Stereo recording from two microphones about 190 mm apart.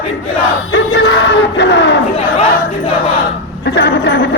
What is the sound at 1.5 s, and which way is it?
Crowd, 65° left (ahead or behind).